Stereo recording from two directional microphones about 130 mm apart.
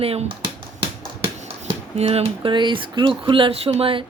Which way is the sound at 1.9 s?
50° right (ahead or behind).